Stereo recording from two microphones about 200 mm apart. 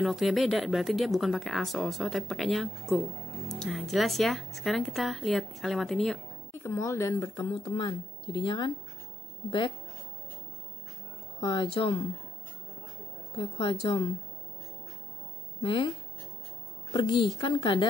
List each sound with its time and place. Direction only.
0.0 s speech: centre (ahead or behind)
6.6 s speech: 15° left (ahead or behind)
11.4 s speech: 25° left (ahead or behind)
13.4 s speech: 25° left (ahead or behind)
15.6 s speech: 25° left (ahead or behind)
16.9 s speech: 25° left (ahead or behind)